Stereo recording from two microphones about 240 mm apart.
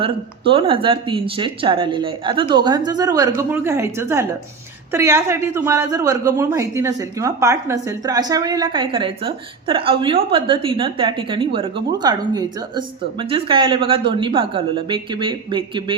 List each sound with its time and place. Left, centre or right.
0.0 s a man's voice: right